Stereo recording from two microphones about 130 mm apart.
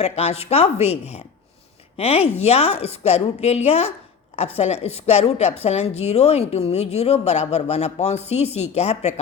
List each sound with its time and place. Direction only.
0.0 s a woman's voice: 50° left (ahead or behind)